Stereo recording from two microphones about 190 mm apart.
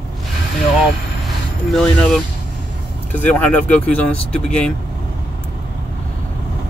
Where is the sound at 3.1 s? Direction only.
10° left (ahead or behind).